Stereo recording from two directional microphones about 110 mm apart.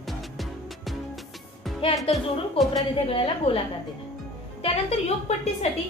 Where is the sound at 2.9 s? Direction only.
55° left (ahead or behind).